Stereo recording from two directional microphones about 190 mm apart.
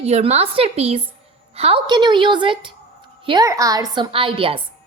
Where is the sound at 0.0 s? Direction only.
35° right (ahead or behind).